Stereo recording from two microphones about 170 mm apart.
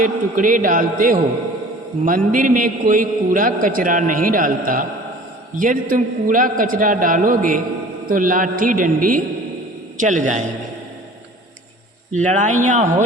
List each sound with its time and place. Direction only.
0.0 s a man's voice: 50° right (ahead or behind)
12.1 s a man's voice: 45° right (ahead or behind)